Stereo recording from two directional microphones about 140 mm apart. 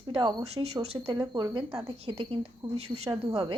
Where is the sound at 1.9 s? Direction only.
45° right (ahead or behind).